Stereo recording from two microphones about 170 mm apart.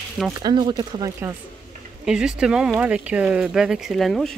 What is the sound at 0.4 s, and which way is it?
Speech, 25° right (ahead or behind).